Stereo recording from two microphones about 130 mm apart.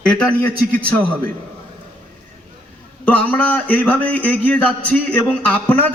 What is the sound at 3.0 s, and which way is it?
Speech, 10° left (ahead or behind).